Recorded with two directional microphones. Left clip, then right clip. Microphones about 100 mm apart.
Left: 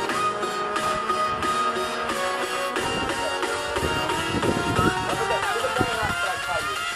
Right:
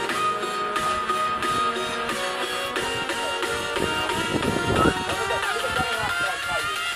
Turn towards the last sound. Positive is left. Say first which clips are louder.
# left 1 dB
turn(degrees=-25)  # may be behind; listen again after turning